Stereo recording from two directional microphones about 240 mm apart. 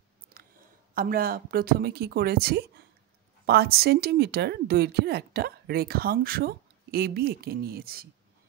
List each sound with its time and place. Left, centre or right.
0.9 s a woman's voice: right